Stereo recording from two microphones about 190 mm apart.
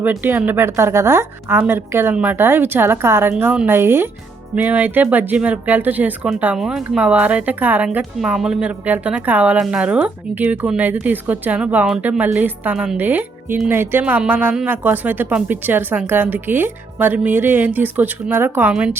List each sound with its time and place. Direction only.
0.0 s speech: 10° right (ahead or behind)